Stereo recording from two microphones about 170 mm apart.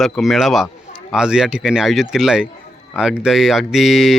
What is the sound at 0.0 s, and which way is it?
Speech, centre (ahead or behind).